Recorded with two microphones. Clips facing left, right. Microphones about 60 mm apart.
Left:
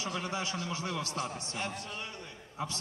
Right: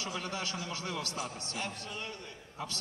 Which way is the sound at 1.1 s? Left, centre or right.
Left.